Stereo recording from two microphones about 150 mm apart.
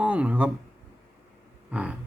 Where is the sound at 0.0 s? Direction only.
10° right (ahead or behind).